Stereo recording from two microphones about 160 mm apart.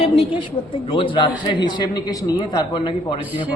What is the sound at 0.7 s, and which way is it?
A man's voice, 30° left (ahead or behind).